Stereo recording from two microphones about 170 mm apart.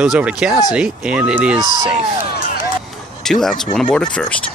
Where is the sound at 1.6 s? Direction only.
25° right (ahead or behind).